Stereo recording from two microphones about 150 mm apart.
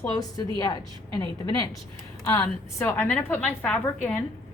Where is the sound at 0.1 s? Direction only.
25° left (ahead or behind); by 4.2 s 10° left (ahead or behind).